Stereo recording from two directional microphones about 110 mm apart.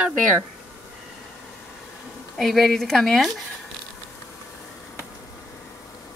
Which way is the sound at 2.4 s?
Centre (ahead or behind).